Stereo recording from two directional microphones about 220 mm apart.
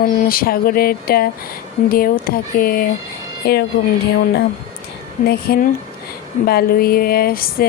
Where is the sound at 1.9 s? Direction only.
40° left (ahead or behind).